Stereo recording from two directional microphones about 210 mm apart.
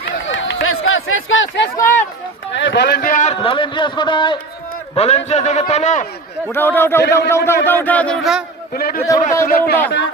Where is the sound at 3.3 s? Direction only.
25° left (ahead or behind).